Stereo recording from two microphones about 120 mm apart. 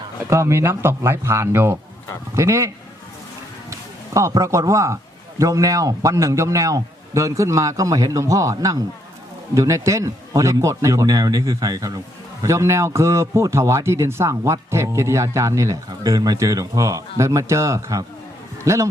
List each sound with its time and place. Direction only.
0.3 s a man's voice: 25° right (ahead or behind)